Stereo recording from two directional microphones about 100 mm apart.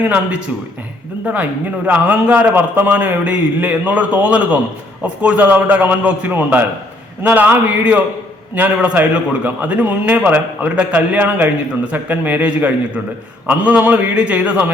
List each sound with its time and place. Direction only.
0.0 s a man's voice: 15° right (ahead or behind)